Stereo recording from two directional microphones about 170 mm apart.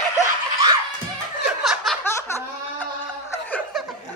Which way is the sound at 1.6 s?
Centre (ahead or behind).